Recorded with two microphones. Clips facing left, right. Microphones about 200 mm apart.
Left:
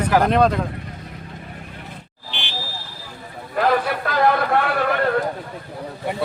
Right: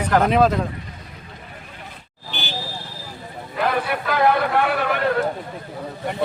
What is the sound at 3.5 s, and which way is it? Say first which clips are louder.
Vehicle: left 3 dB; 55° left (ahead or behind).